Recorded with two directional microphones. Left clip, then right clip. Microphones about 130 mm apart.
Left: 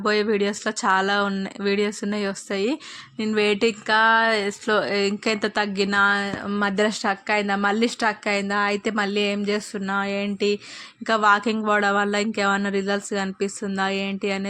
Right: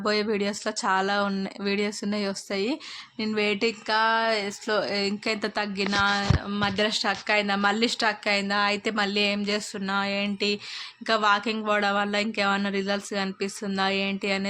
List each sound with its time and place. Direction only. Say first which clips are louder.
0.0 s speech: left 4 dB; 20° left (ahead or behind)
6.5 s speech: left 4 dB; 55° left (ahead or behind); by 14.4 s 30° left (ahead or behind)